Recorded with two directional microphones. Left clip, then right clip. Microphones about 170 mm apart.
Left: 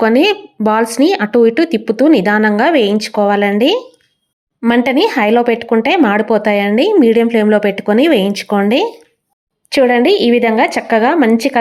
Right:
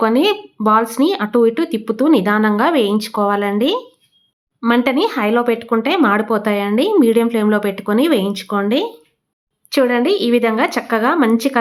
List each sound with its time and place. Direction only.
0.0 s speech: 15° left (ahead or behind)